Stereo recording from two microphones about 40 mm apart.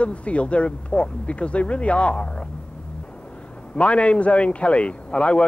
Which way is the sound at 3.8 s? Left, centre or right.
Left.